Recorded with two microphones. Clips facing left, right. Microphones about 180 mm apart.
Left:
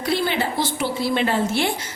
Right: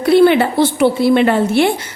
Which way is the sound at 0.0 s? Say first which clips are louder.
Right 13 dB; 60° right (ahead or behind).